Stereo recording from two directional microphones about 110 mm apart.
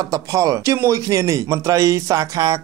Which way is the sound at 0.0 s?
30° right (ahead or behind).